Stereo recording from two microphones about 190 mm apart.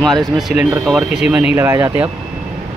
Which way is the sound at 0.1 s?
Centre (ahead or behind).